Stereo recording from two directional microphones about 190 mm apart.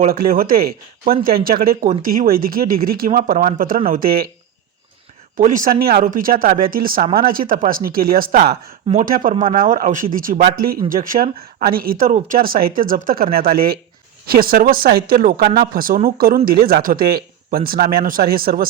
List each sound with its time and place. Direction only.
0.1 s speech: 50° right (ahead or behind)
5.4 s speech: 45° right (ahead or behind)